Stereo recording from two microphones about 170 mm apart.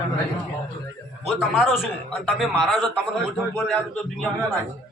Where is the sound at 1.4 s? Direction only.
Centre (ahead or behind).